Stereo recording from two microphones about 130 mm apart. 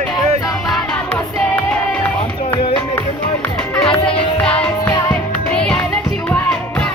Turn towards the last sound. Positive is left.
turn(degrees=5)  # may be behind; listen again after turning